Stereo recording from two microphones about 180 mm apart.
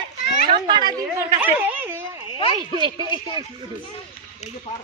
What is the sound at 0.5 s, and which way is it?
Speech, 25° right (ahead or behind).